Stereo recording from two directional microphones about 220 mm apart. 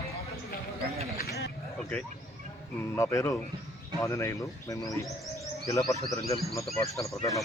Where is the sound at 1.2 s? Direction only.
45° left (ahead or behind).